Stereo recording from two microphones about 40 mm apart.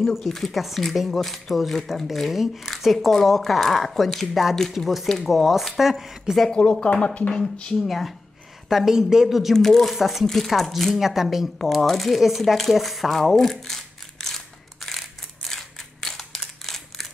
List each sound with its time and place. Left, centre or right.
0.1 s speech: centre
6.5 s speech: left
7.8 s speech: centre
8.6 s speech: centre
9.6 s speech: centre
9.9 s speech: centre
11.0 s speech: centre
11.5 s speech: centre
14.2 s crushing: centre
16.3 s crumpling: centre